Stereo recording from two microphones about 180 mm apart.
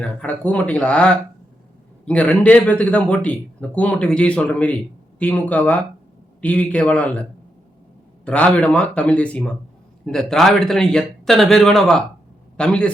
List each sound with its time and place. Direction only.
0.0 s a man's voice: 5° left (ahead or behind)